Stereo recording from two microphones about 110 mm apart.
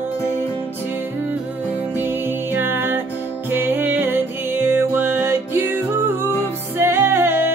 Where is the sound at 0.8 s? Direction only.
20° right (ahead or behind).